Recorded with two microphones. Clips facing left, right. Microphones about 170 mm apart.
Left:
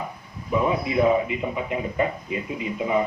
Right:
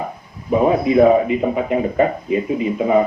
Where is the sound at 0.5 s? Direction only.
50° right (ahead or behind).